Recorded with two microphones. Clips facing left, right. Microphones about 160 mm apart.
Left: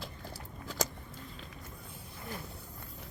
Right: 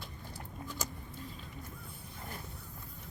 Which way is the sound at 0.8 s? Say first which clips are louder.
Left 9 dB; 90° left.